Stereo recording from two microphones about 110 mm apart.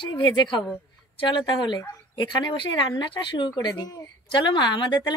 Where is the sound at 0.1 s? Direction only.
40° left (ahead or behind).